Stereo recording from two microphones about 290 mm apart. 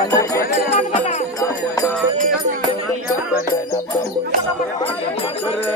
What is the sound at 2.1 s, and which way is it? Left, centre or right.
Music, right.